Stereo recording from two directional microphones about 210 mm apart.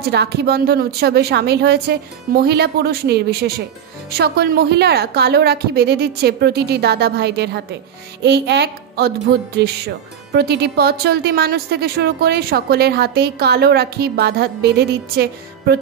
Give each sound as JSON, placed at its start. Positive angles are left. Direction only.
{"t": 0.1, "sound": "a woman's voice", "side_deg": -50}